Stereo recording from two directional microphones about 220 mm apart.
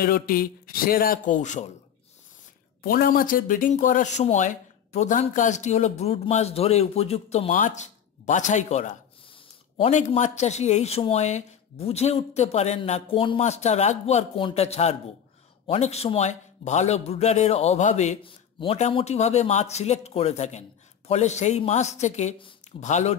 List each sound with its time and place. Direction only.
0.0 s speech: 40° left (ahead or behind)
2.8 s speech: 40° left (ahead or behind)